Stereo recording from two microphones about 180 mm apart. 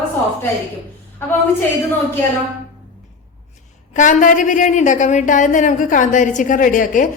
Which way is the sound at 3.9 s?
45° left (ahead or behind).